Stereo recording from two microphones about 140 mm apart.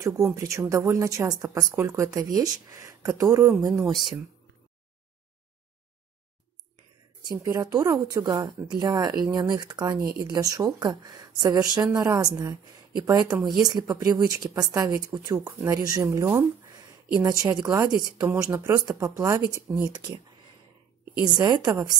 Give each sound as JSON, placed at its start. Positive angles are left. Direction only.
{"t": 0.0, "sound": "a woman's voice", "side_deg": -20}
{"t": 3.8, "sound": "speech", "side_deg": 0}
{"t": 7.2, "sound": "a woman's voice", "side_deg": -25}
{"t": 21.4, "sound": "a woman's voice", "side_deg": -30}